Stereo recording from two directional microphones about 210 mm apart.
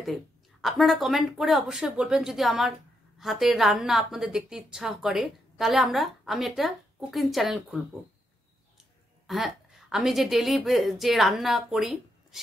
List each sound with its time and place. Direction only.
0.0 s a woman's voice: centre (ahead or behind)
9.3 s a woman's voice: centre (ahead or behind)